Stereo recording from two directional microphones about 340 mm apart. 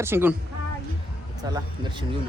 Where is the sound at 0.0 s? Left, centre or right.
Centre.